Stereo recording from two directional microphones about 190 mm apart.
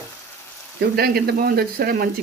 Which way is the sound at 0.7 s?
55° right (ahead or behind).